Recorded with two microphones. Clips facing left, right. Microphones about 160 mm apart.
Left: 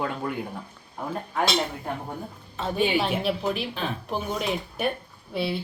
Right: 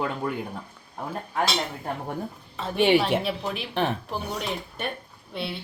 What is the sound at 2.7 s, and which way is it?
Speech, 75° right (ahead or behind).